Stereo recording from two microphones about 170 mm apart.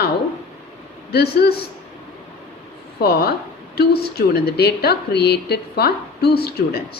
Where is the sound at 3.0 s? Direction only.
70° left (ahead or behind).